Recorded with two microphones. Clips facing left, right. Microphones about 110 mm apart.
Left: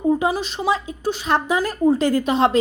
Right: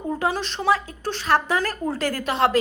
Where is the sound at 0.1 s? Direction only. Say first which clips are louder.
Left 3 dB; 15° left (ahead or behind).